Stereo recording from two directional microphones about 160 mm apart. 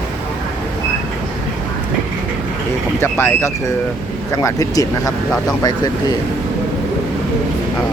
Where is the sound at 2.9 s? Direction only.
15° left (ahead or behind).